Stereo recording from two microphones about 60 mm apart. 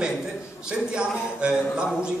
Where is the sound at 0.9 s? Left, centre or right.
Centre.